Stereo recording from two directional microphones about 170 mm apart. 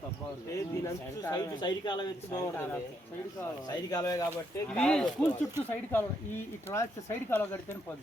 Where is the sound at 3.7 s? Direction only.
25° left (ahead or behind).